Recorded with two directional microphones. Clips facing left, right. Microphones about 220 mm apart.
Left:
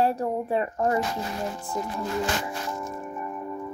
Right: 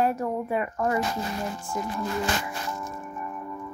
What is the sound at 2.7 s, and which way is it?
Crack, 20° left (ahead or behind).